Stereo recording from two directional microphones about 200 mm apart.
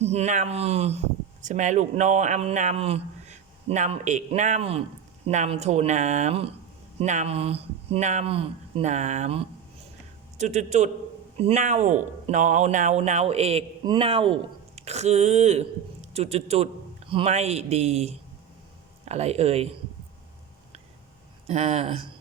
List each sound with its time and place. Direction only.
0.0 s a man's voice: 35° right (ahead or behind)
21.4 s a man's voice: 35° right (ahead or behind)